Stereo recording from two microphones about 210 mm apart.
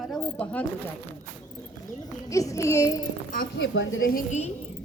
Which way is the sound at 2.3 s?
15° left (ahead or behind).